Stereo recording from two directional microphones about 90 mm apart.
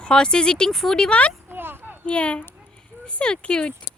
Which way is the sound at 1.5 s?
25° right (ahead or behind).